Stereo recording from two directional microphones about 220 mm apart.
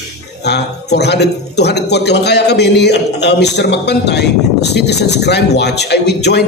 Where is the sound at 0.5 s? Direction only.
50° left (ahead or behind).